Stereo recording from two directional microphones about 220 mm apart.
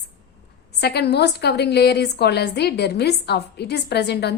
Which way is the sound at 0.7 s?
50° left (ahead or behind).